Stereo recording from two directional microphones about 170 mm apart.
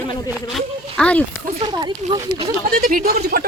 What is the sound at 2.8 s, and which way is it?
Speech, 55° right (ahead or behind).